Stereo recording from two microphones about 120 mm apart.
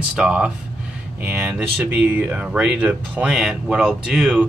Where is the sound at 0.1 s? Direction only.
10° right (ahead or behind).